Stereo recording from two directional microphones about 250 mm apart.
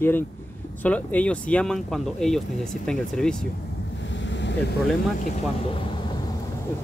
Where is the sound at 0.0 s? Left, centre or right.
Centre.